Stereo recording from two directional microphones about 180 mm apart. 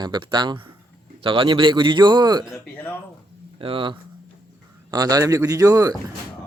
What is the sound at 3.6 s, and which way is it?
Speech, 30° right (ahead or behind).